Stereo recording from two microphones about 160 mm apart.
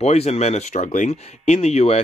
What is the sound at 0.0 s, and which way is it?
Speech, 40° left (ahead or behind).